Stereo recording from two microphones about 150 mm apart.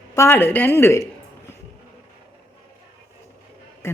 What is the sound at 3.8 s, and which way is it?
Music, 20° left (ahead or behind).